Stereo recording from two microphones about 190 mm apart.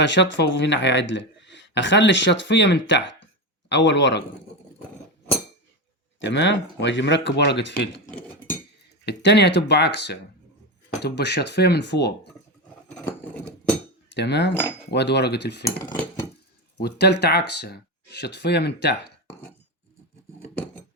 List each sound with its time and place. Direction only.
0.0 s speech: 70° left (ahead or behind)
6.1 s speech: 70° left (ahead or behind)
9.0 s speech: 60° left (ahead or behind)
14.1 s cutlery: 65° left (ahead or behind)
14.8 s speech: 65° left (ahead or behind)
16.8 s speech: 60° left (ahead or behind)